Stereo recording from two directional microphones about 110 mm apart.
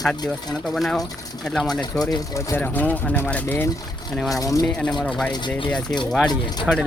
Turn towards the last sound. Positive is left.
turn(degrees=5)  # may be behind; listen again after turning